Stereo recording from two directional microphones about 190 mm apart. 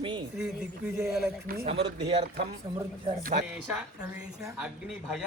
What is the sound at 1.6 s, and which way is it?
Speech, 30° right (ahead or behind).